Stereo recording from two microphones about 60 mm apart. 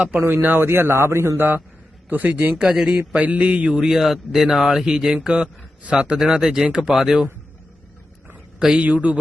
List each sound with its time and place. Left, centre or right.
0.2 s a man's voice: right
2.0 s mantra: right
2.6 s speech: centre
3.1 s mantra: right
3.8 s a man's voice: centre
8.5 s a man's voice: centre
8.9 s mantra: right